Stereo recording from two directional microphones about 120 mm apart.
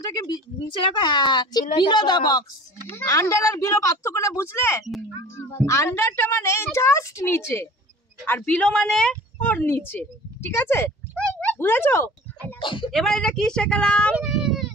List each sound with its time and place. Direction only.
0.8 s a woman's voice: 40° left (ahead or behind)
2.9 s a woman's voice: 20° left (ahead or behind)
12.5 s speech: 45° left (ahead or behind)
12.9 s speech: 5° left (ahead or behind)
14.1 s a sound: 5° right (ahead or behind)